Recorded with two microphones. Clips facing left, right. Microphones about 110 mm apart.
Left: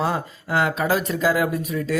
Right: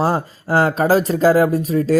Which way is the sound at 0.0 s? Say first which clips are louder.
Right 5 dB; 35° right (ahead or behind).